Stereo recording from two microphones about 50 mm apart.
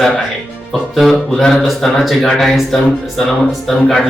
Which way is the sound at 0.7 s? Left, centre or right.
Centre.